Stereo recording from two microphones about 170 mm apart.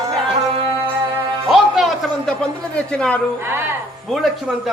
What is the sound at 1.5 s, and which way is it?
A man's voice, centre (ahead or behind).